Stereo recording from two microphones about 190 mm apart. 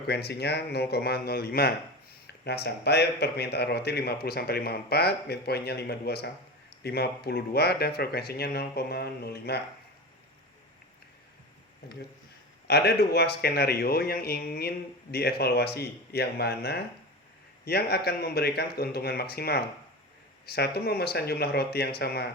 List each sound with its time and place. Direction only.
0.1 s speech: 60° left (ahead or behind)
12.6 s speech: 60° left (ahead or behind)